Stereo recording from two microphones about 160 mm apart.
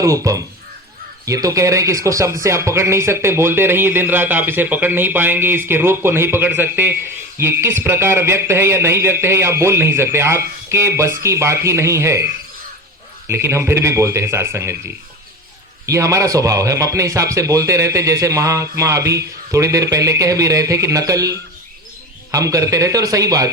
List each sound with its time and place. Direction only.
0.0 s a man's voice: 20° right (ahead or behind)